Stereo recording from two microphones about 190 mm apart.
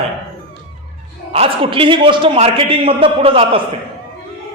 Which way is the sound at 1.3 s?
30° right (ahead or behind).